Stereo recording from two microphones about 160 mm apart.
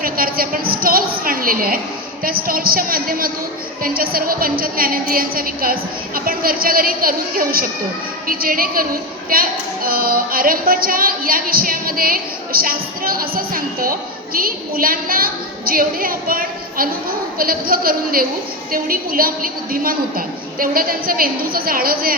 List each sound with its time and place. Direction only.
0.0 s a woman's voice: 65° right (ahead or behind)